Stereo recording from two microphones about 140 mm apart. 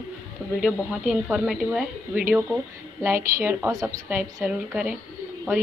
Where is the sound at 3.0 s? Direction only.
15° right (ahead or behind).